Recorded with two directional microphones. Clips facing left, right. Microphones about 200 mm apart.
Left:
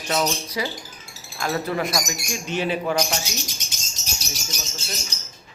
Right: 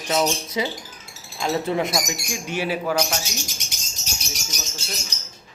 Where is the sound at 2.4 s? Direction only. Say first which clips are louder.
Left 1 dB; 10° right (ahead or behind).